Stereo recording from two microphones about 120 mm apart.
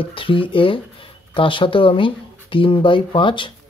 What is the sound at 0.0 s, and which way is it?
Speech, 45° left (ahead or behind).